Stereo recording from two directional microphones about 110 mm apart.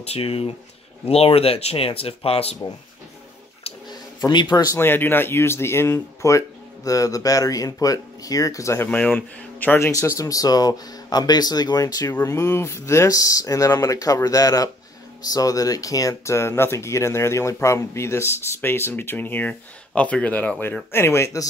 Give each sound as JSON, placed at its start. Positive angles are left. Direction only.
{"t": 0.0, "sound": "speech", "side_deg": 65}
{"t": 4.3, "sound": "speech", "side_deg": 40}
{"t": 4.7, "sound": "speech", "side_deg": 20}
{"t": 9.8, "sound": "speech", "side_deg": 30}
{"t": 20.9, "sound": "speech", "side_deg": 20}